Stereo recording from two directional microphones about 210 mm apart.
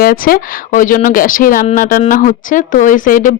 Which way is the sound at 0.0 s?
45° left (ahead or behind).